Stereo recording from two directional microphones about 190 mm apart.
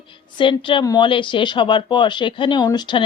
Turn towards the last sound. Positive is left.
turn(degrees=25)  # may be behind; listen again after turning